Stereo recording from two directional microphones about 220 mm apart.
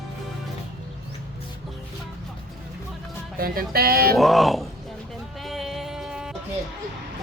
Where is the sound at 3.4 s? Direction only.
40° right (ahead or behind).